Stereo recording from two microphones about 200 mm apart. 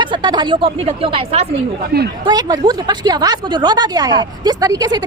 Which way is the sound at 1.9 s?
50° right (ahead or behind).